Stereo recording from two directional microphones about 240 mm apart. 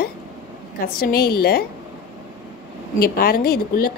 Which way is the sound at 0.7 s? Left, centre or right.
Left.